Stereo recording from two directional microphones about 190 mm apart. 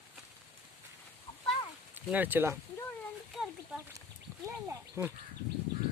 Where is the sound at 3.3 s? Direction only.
Centre (ahead or behind).